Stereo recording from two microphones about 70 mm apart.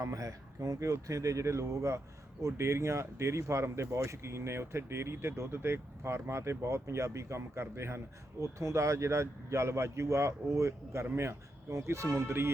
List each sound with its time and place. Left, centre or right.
0.0 s a man's voice: right